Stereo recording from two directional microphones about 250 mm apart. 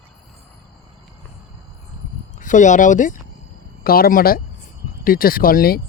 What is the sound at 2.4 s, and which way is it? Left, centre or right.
Speech, left.